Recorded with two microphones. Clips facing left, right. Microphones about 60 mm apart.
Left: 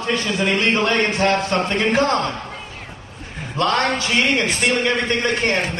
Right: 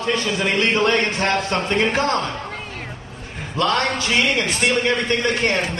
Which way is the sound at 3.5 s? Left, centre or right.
Left.